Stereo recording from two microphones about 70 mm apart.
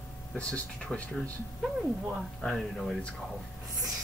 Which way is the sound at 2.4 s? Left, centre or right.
Centre.